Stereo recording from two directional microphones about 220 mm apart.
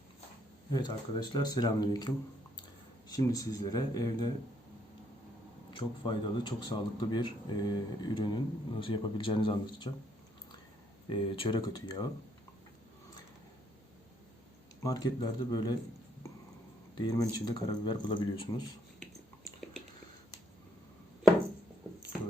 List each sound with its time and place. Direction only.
0.7 s speech: 20° left (ahead or behind)
5.7 s speech: 20° left (ahead or behind)
11.1 s speech: 25° left (ahead or behind)
14.8 s speech: 15° left (ahead or behind)
17.0 s speech: 20° left (ahead or behind)